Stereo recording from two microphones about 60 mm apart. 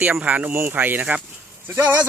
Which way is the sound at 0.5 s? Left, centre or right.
Right.